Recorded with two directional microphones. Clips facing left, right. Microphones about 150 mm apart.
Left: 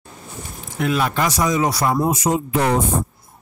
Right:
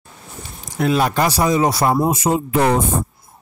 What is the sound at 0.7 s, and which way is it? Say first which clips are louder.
Speech: right 3 dB; 35° right (ahead or behind).